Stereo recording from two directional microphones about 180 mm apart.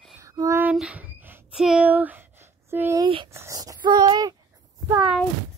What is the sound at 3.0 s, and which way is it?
Speech, 30° right (ahead or behind).